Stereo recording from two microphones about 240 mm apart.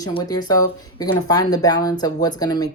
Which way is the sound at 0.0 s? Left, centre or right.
Centre.